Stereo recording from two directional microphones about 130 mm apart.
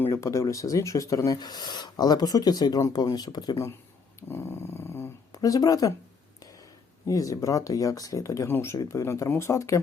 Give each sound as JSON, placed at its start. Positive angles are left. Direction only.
{"t": 0.0, "sound": "speech", "side_deg": 20}
{"t": 7.1, "sound": "speech", "side_deg": 25}